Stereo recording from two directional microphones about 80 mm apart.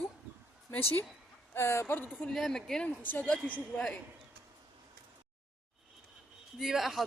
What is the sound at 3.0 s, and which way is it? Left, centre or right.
Speech, left.